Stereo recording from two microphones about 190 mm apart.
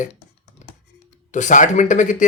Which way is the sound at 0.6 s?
40° left (ahead or behind).